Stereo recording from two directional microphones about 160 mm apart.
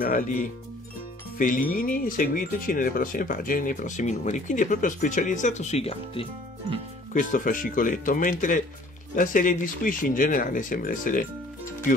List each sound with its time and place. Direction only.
0.0 s speech: 60° left (ahead or behind); by 6.2 s 40° left (ahead or behind)
7.2 s speech: 55° left (ahead or behind)